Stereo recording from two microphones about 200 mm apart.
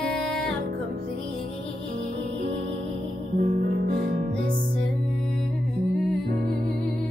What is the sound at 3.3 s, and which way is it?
Music, 45° right (ahead or behind).